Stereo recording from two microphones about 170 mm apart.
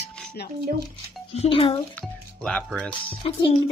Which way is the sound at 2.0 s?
5° left (ahead or behind).